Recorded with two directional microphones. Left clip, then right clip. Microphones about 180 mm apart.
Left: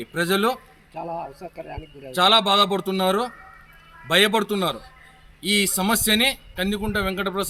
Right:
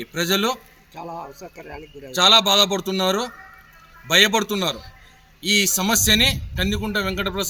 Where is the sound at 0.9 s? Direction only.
30° left (ahead or behind).